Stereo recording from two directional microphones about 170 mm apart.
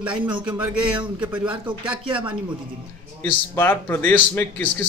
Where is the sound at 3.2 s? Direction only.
15° left (ahead or behind).